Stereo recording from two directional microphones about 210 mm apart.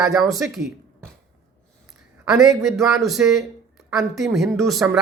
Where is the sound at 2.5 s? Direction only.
Centre (ahead or behind).